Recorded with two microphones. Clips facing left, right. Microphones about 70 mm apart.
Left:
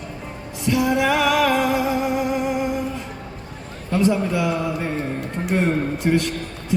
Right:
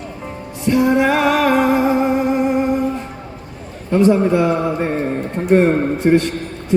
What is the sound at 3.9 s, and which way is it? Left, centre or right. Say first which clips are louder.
A man's voice: right 6 dB; right.